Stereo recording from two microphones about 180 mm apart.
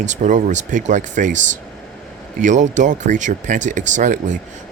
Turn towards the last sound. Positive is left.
turn(degrees=-45)  # may be behind; listen again after turning